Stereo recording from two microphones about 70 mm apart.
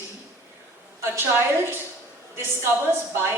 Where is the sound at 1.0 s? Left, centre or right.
Right.